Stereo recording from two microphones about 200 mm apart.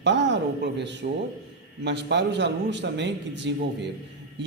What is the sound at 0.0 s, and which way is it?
A man's voice, 65° right (ahead or behind).